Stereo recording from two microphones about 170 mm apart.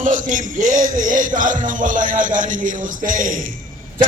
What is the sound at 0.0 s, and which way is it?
Music, 50° right (ahead or behind).